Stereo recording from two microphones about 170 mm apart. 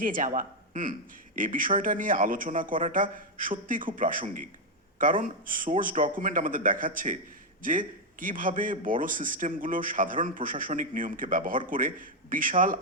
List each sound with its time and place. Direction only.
0.0 s a man's voice: 50° right (ahead or behind)